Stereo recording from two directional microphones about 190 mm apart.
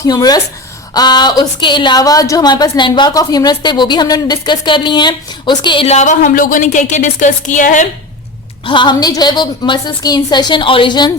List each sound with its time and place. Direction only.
0.1 s a woman's voice: 20° left (ahead or behind); by 7.9 s 40° left (ahead or behind)
8.6 s a woman's voice: 25° left (ahead or behind)